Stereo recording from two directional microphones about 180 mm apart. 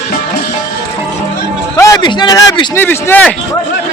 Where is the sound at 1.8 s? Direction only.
20° left (ahead or behind).